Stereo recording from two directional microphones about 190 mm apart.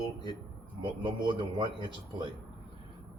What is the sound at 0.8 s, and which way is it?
A man's voice, 25° right (ahead or behind).